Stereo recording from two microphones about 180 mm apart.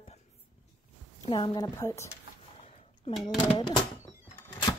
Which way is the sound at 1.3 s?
25° left (ahead or behind).